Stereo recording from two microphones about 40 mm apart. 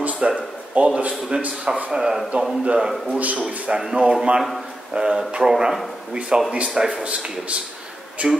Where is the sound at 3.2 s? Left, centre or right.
Right.